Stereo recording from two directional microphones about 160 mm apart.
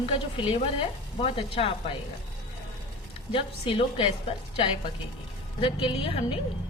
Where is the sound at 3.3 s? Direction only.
35° left (ahead or behind).